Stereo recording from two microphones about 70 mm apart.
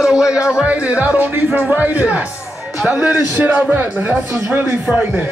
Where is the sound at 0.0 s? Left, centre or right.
Centre.